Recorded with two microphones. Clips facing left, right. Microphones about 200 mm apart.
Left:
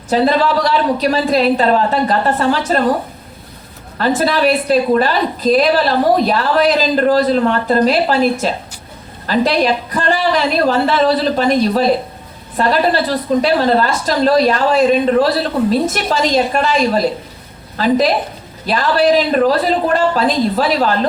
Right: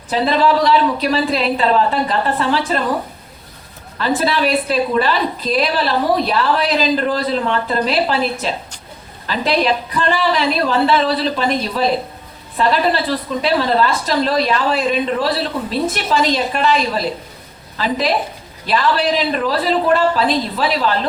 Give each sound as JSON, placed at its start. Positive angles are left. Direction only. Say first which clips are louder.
{"t": 0.1, "sound": "a woman's voice", "louder": "left 2 dB", "side_deg": 45}
{"t": 3.9, "sound": "a woman's voice", "louder": "left 3 dB", "side_deg": 45}